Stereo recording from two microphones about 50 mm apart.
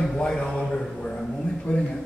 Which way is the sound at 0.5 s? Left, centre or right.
Centre.